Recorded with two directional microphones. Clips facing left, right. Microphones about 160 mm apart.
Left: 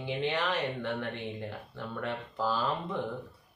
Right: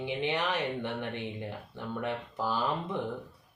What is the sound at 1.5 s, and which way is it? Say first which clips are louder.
Speech: right 2 dB; 15° right (ahead or behind).